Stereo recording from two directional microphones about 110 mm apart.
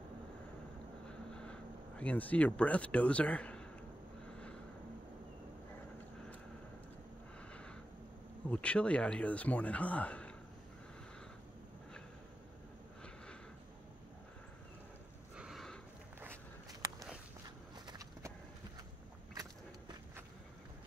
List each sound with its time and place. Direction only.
1.3 s speech: 10° left (ahead or behind)
8.5 s speech: 10° left (ahead or behind)
15.3 s a sound: 5° right (ahead or behind)
17.7 s horse: 40° right (ahead or behind)